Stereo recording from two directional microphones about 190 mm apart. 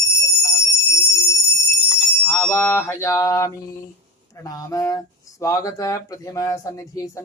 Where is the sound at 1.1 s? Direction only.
15° left (ahead or behind).